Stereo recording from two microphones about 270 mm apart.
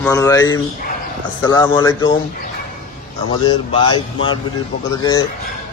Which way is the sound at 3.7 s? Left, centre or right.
Centre.